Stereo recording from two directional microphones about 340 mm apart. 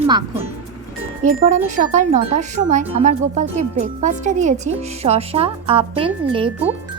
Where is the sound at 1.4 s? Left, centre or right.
Right.